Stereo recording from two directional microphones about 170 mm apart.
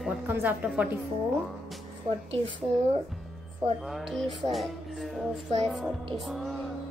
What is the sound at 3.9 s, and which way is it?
Music, centre (ahead or behind).